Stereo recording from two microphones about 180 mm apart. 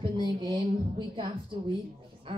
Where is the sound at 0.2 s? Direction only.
25° right (ahead or behind).